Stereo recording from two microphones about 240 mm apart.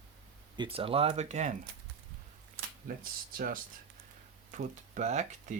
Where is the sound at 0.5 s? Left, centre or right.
Right.